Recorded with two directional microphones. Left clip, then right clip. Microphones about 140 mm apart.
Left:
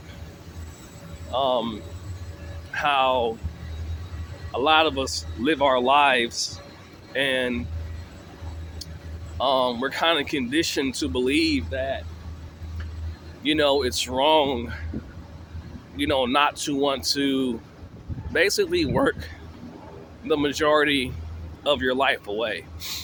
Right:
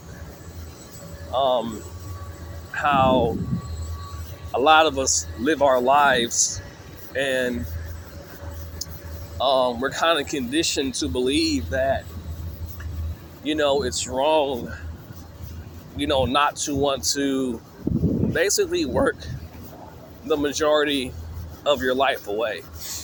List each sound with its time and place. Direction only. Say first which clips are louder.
1.3 s speech: right 2 dB; 25° left (ahead or behind)
2.7 s speech: right 2 dB; 20° left (ahead or behind)
4.5 s a man's voice: right 3 dB; 10° left (ahead or behind)
9.4 s speech: right 2 dB; 20° left (ahead or behind)
11.7 s a man's voice: right 5 dB; 5° left (ahead or behind)
13.4 s speech: left 1 dB; 35° left (ahead or behind)
16.0 s speech: right 1 dB; 25° left (ahead or behind)
22.8 s speech: left 2 dB; 35° left (ahead or behind)